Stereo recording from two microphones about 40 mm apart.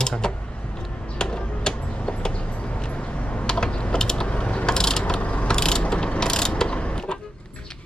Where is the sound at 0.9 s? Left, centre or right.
Left.